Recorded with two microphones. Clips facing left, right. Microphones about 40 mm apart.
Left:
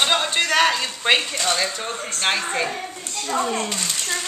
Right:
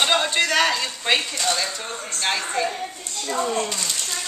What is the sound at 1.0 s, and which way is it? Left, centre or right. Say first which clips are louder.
Speech: left 3 dB; centre.